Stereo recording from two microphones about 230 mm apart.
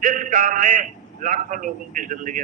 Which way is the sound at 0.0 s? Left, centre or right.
Right.